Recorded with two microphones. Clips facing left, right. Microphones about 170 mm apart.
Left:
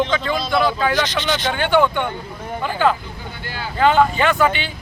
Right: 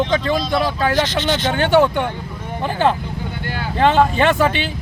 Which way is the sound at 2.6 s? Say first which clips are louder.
Right 1 dB; 25° right (ahead or behind).